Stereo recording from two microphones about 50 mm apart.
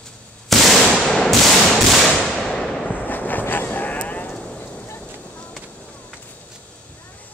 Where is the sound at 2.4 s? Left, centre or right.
Centre.